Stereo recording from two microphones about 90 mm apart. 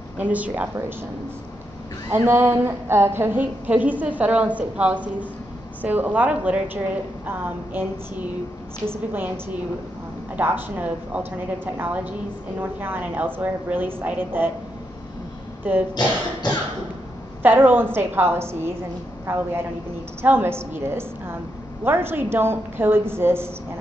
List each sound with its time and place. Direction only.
0.2 s a woman's voice: 15° right (ahead or behind)
2.1 s a woman's voice: 25° right (ahead or behind)
15.7 s a woman's voice: 20° right (ahead or behind)
17.4 s a woman's voice: 20° right (ahead or behind)